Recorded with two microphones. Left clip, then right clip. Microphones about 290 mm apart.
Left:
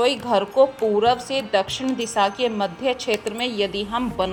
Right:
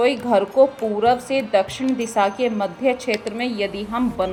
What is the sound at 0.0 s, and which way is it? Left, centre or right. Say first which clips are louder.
A woman's voice: right 2 dB; left.